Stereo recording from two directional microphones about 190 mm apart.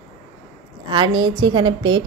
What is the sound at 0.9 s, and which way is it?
A woman's voice, 25° right (ahead or behind).